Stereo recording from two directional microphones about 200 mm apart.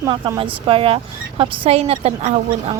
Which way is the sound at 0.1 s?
25° right (ahead or behind).